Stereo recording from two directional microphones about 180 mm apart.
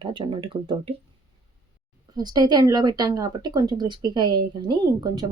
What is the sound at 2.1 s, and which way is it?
Speech, 20° right (ahead or behind).